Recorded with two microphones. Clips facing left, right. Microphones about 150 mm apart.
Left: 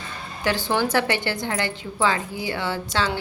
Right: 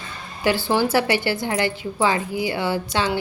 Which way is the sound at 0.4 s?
10° right (ahead or behind).